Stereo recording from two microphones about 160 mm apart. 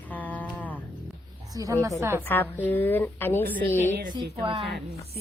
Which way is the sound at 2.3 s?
10° left (ahead or behind).